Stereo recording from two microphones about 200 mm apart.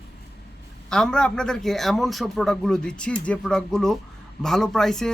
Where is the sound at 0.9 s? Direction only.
5° left (ahead or behind).